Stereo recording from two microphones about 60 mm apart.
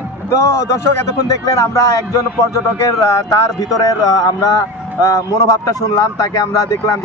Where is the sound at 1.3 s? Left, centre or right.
Left.